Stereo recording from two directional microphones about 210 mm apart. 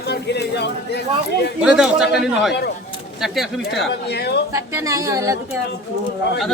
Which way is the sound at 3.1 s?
Centre (ahead or behind).